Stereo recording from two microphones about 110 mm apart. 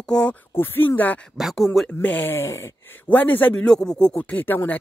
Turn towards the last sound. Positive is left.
turn(degrees=15)  # may be behind; listen again after turning